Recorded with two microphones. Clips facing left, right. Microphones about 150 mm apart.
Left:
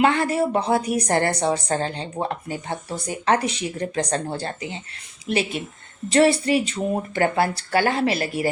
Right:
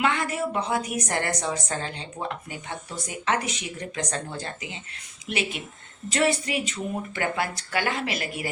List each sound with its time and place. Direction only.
0.0 s a woman's voice: 35° left (ahead or behind)